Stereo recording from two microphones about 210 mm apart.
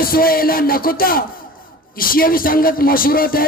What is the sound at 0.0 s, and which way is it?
Speech, 45° left (ahead or behind).